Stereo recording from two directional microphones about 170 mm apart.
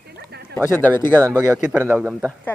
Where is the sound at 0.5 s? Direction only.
10° left (ahead or behind).